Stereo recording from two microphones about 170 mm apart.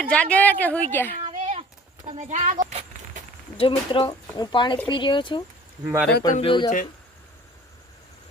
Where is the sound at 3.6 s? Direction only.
30° left (ahead or behind).